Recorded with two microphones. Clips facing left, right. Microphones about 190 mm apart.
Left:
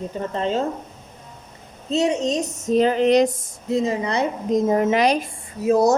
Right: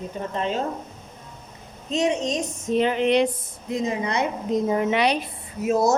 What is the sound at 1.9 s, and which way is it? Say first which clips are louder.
Speech: left 3 dB; 20° right (ahead or behind).